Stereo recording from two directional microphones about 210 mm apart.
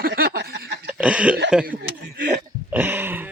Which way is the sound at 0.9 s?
5° right (ahead or behind).